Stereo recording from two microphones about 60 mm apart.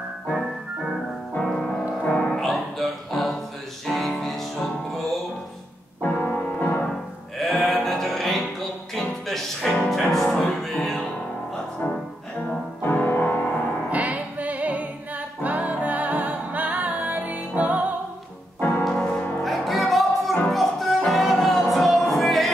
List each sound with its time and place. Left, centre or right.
1.4 s music: centre
2.0 s music: left
2.5 s music: centre
6.0 s music: left
6.9 s music: centre
12.8 s music: left
13.8 s music: right
18.6 s piano: left
18.9 s music: centre
19.4 s music: centre